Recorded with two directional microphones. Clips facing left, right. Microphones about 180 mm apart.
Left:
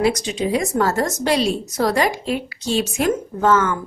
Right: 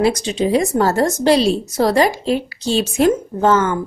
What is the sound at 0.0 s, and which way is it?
A woman's voice, 30° right (ahead or behind).